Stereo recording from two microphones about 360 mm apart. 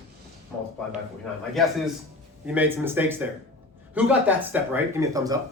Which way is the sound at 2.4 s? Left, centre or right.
Centre.